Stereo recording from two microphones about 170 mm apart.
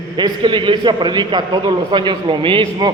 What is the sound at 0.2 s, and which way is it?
A man's voice, 30° right (ahead or behind).